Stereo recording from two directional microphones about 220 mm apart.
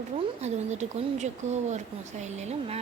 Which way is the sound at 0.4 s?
30° right (ahead or behind).